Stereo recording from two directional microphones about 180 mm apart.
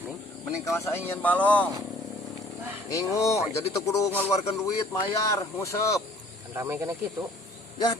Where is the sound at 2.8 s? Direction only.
20° left (ahead or behind).